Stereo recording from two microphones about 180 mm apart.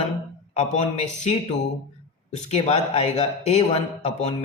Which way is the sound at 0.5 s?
35° left (ahead or behind).